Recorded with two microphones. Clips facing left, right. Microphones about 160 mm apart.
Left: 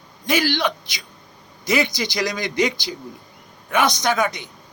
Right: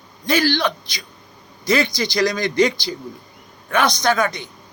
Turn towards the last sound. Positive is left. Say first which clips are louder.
# right 2 dB
turn(degrees=20)  # may be behind; listen again after turning